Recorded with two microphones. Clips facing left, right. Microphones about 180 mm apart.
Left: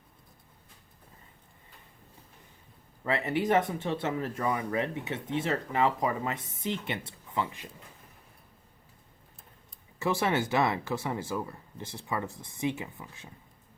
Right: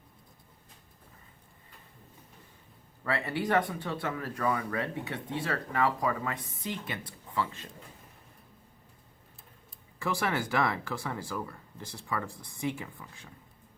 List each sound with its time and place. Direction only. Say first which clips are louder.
3.0 s speech: left 3 dB; 20° left (ahead or behind)
10.0 s speech: left 3 dB; 20° left (ahead or behind)